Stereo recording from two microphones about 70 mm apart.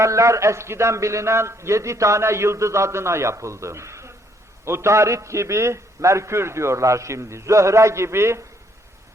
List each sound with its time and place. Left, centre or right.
0.0 s a man's voice: right